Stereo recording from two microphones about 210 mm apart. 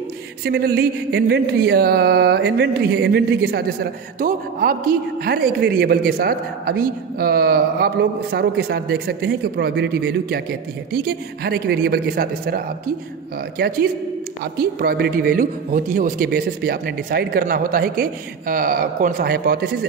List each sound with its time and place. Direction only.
0.5 s mantra: 45° right (ahead or behind)